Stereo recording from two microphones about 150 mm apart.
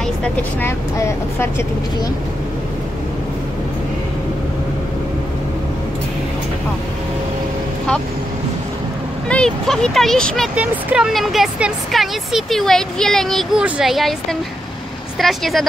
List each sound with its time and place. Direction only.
0.2 s speech: 10° left (ahead or behind)
9.3 s speech: 5° left (ahead or behind)
10.5 s speech: 10° right (ahead or behind)
15.1 s speech: centre (ahead or behind)